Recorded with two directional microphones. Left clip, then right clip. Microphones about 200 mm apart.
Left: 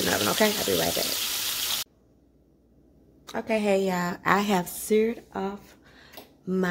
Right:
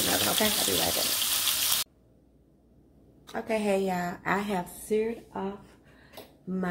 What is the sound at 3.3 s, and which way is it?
A woman's voice, 40° left (ahead or behind).